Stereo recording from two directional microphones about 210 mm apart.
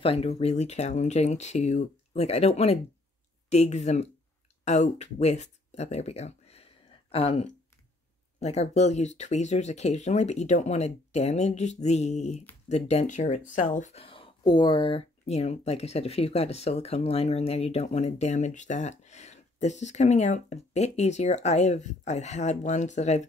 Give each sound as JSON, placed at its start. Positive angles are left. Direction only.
{"t": 0.0, "sound": "speech", "side_deg": 30}